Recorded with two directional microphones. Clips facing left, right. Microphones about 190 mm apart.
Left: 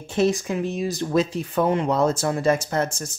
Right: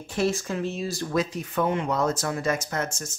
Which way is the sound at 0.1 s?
20° left (ahead or behind).